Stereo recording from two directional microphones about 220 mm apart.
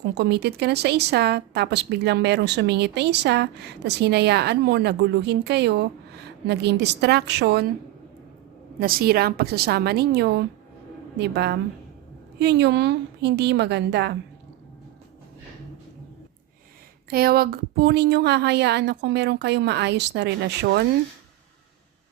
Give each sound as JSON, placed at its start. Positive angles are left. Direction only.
{"t": 0.0, "sound": "speech", "side_deg": -50}
{"t": 8.8, "sound": "speech", "side_deg": -40}
{"t": 17.1, "sound": "speech", "side_deg": -45}